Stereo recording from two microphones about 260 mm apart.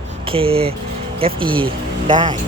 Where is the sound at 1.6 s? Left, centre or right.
Centre.